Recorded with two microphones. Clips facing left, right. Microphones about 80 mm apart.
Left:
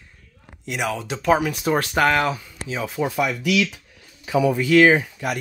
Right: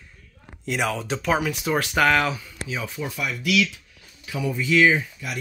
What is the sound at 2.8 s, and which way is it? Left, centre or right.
Speech, left.